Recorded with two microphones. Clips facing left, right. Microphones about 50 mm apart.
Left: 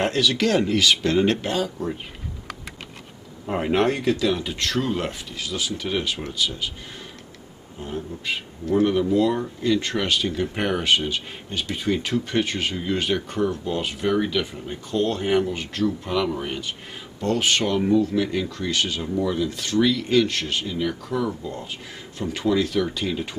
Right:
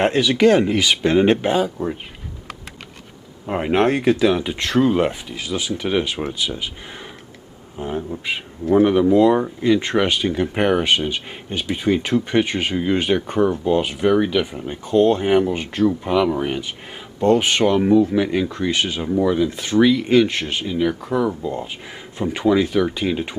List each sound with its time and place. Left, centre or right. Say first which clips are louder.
0.0 s speech: right 6 dB; right
3.4 s speech: right 3 dB; centre
7.8 s speech: right 5 dB; right